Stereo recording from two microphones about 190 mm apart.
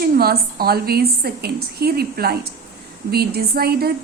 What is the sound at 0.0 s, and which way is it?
A woman's voice, 55° right (ahead or behind).